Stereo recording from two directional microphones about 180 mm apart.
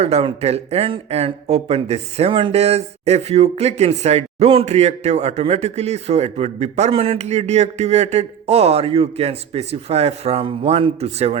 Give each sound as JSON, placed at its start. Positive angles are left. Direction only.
{"t": 0.0, "sound": "speech", "side_deg": -35}